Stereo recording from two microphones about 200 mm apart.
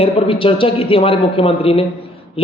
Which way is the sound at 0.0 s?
25° left (ahead or behind).